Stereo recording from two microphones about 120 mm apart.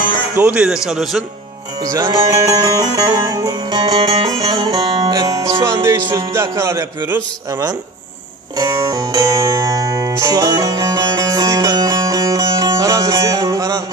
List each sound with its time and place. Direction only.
0.3 s speech: 10° right (ahead or behind)
1.8 s music: 30° right (ahead or behind)